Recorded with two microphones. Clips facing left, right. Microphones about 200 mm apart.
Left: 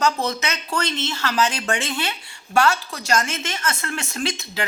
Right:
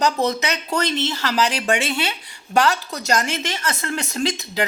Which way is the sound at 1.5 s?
30° right (ahead or behind).